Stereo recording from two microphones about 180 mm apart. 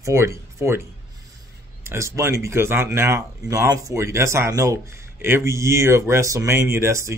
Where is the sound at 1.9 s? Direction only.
15° right (ahead or behind).